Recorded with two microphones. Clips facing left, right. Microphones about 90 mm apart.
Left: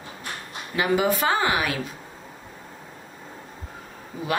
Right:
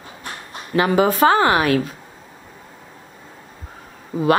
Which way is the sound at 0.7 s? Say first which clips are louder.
Right 6 dB; 45° right (ahead or behind).